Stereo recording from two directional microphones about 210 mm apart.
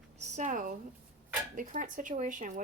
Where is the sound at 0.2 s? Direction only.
35° right (ahead or behind).